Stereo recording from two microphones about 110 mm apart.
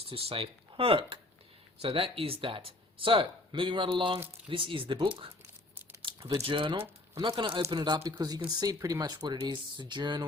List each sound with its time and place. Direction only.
0.1 s speech: 60° right (ahead or behind)
6.4 s speech: 50° right (ahead or behind)